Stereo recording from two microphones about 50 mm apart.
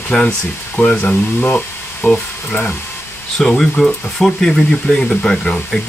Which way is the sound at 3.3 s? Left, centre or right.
Centre.